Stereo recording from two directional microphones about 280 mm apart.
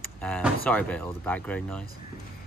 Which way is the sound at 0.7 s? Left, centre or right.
Centre.